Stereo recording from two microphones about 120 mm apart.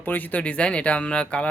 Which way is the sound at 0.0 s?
15° left (ahead or behind).